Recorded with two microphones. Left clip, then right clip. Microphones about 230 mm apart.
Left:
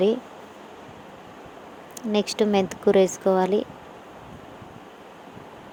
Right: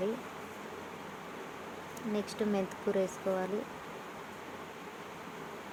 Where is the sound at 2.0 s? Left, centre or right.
Left.